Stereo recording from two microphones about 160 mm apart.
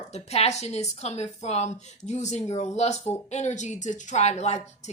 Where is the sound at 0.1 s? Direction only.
45° left (ahead or behind).